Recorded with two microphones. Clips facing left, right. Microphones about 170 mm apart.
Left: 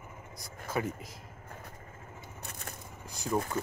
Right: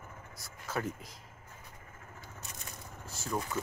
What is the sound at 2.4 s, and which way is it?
Crushing, 55° left (ahead or behind).